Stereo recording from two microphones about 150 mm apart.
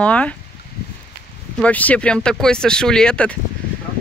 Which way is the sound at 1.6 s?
10° left (ahead or behind).